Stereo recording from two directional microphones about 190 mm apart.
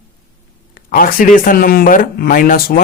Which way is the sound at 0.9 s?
45° left (ahead or behind).